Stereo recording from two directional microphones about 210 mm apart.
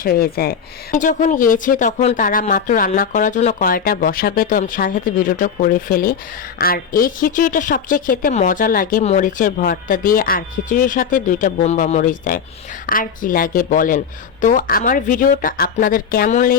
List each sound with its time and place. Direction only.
0.0 s speech: 45° left (ahead or behind)